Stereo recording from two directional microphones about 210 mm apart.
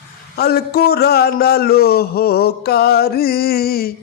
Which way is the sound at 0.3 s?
50° left (ahead or behind).